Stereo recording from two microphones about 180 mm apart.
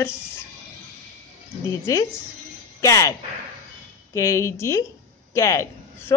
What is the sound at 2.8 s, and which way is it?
Speech, 15° left (ahead or behind).